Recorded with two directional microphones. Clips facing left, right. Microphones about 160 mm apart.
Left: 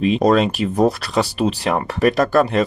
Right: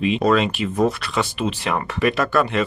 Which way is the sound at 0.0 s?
40° left (ahead or behind).